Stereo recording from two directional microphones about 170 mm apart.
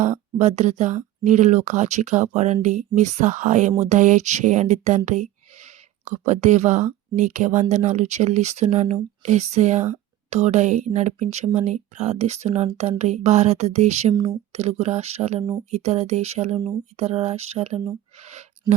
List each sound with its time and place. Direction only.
0.0 s speech: 45° right (ahead or behind)